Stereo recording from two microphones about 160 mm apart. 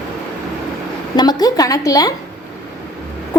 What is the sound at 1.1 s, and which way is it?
A woman's voice, 25° left (ahead or behind).